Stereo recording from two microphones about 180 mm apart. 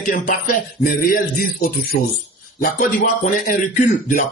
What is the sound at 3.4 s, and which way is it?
Speech, 50° left (ahead or behind).